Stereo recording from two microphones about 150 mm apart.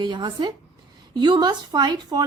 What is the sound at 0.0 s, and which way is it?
Speech, 30° right (ahead or behind).